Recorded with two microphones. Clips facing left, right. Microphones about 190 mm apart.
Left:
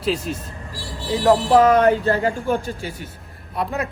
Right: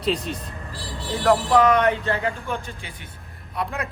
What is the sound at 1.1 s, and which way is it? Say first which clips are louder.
Speech: left 3 dB; 20° left (ahead or behind).